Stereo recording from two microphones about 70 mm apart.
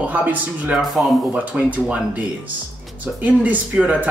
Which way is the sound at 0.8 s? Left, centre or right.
Centre.